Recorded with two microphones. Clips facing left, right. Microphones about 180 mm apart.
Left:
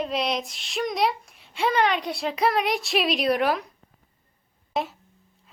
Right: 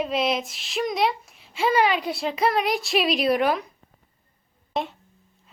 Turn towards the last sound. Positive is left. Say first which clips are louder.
# even
turn(degrees=0)  # may be behind; listen again after turning